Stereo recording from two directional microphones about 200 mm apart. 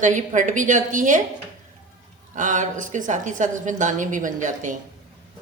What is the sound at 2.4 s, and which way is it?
A woman's voice, 40° right (ahead or behind).